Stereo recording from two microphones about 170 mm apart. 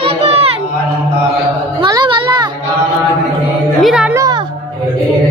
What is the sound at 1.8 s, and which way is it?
Children playing, 25° right (ahead or behind).